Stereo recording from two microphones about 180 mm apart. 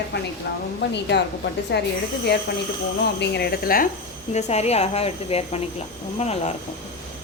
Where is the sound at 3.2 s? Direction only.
65° left (ahead or behind).